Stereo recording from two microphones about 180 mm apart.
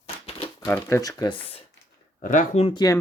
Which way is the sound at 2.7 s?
20° left (ahead or behind).